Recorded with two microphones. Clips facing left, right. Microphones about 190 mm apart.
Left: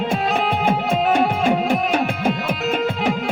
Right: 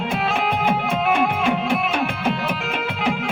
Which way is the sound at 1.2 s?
35° left (ahead or behind).